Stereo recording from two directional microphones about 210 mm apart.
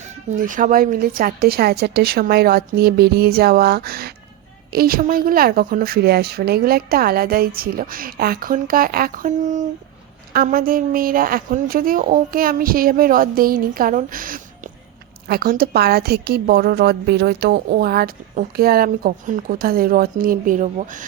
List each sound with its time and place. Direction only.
0.3 s a woman's voice: 40° right (ahead or behind)